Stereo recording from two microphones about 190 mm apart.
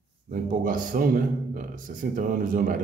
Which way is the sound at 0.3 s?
45° right (ahead or behind).